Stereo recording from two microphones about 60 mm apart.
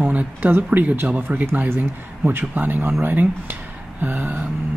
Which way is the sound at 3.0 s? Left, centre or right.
Right.